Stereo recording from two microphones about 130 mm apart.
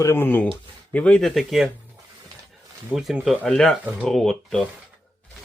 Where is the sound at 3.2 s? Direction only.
Centre (ahead or behind).